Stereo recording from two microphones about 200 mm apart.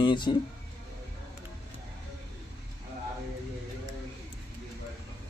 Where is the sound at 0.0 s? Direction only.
20° left (ahead or behind).